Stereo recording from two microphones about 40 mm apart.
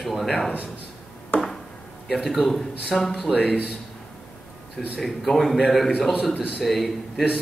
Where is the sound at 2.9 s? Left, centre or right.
Centre.